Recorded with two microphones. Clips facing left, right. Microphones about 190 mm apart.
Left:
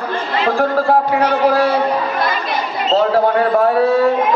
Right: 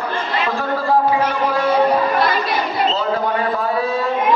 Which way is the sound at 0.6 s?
70° left (ahead or behind).